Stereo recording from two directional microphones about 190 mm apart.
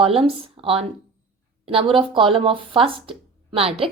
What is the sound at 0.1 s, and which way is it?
Speech, 30° right (ahead or behind).